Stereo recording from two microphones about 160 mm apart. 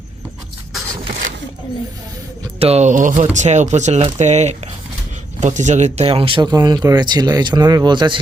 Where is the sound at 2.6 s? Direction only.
40° right (ahead or behind).